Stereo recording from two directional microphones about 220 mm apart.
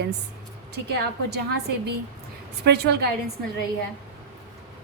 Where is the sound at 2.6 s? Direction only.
50° right (ahead or behind).